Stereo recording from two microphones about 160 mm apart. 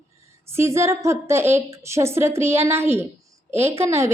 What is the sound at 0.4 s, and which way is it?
A woman's voice, 15° right (ahead or behind).